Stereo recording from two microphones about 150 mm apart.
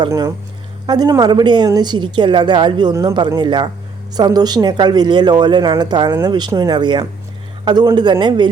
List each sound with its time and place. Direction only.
0.1 s speech: 20° right (ahead or behind)